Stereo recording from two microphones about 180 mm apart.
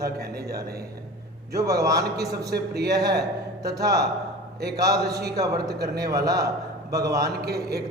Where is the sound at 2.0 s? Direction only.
65° right (ahead or behind).